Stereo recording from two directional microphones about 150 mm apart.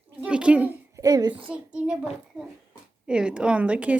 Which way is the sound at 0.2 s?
5° right (ahead or behind).